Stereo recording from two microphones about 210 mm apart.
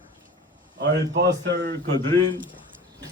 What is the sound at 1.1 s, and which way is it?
Speech, 60° right (ahead or behind).